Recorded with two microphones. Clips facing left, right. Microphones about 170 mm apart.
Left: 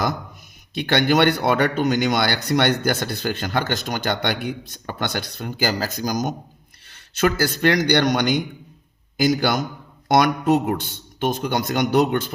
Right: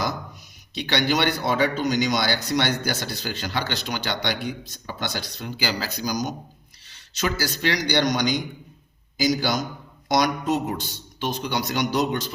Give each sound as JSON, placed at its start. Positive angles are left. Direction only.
{"t": 0.7, "sound": "speech", "side_deg": 55}